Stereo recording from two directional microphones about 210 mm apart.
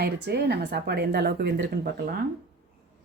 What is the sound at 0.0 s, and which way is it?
Speech, 50° right (ahead or behind).